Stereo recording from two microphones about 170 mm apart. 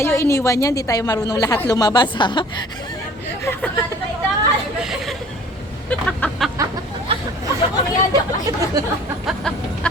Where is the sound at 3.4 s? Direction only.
10° left (ahead or behind).